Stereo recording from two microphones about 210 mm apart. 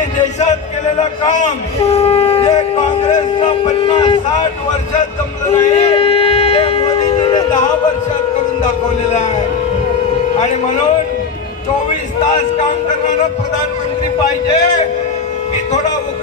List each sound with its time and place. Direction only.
1.3 s speech: 30° left (ahead or behind)
3.6 s speech: 25° left (ahead or behind)
5.5 s a sound: 30° left (ahead or behind)